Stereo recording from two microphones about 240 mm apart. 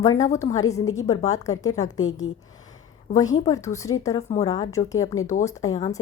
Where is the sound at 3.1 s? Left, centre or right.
Centre.